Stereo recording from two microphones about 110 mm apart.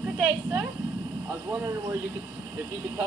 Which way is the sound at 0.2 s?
20° right (ahead or behind).